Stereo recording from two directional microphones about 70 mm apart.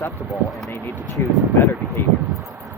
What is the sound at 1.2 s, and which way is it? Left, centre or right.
Speech, left.